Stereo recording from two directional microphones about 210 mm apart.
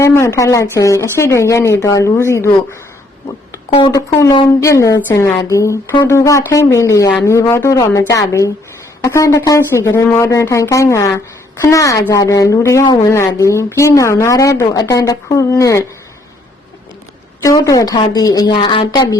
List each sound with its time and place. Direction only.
0.0 s a woman's voice: 15° left (ahead or behind)
3.7 s a woman's voice: 20° left (ahead or behind)
17.4 s a woman's voice: 15° left (ahead or behind)